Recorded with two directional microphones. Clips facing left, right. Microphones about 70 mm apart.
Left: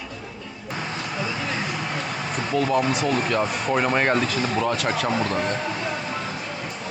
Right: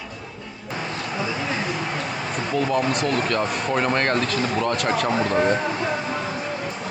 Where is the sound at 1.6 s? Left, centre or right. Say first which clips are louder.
Right 2 dB; centre.